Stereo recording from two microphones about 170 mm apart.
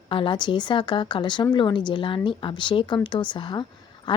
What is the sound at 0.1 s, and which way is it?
Speech, 30° left (ahead or behind).